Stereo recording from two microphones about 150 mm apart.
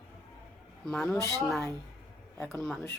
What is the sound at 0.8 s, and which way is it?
Speech, 5° left (ahead or behind).